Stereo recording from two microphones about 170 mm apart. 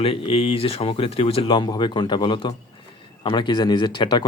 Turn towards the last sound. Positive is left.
turn(degrees=25)  # may be behind; listen again after turning